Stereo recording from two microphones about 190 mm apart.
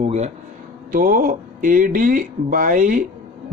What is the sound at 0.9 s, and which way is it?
A man's voice, 45° right (ahead or behind).